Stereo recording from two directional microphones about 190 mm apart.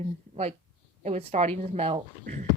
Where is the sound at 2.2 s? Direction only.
45° right (ahead or behind).